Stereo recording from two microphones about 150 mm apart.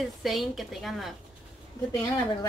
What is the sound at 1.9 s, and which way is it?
Speech, 25° left (ahead or behind).